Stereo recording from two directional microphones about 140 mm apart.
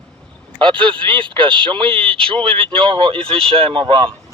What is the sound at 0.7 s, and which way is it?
Speech, 35° right (ahead or behind).